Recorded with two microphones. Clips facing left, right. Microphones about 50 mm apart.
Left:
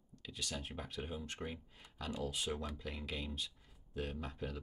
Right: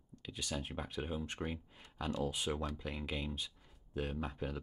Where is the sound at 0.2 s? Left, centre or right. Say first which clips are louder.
Right 3 dB; centre.